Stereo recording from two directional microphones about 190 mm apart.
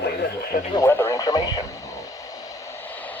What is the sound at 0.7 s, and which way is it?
Radio, 15° left (ahead or behind).